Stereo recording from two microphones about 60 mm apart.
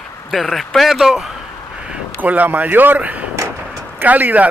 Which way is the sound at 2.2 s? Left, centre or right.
Right.